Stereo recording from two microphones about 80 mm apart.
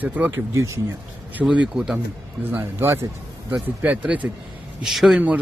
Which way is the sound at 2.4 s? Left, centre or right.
Right.